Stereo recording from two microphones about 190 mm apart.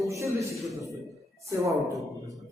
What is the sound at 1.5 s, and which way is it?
Speech, 15° right (ahead or behind).